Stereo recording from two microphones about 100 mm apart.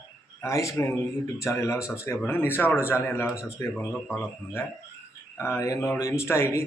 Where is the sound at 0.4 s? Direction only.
30° left (ahead or behind).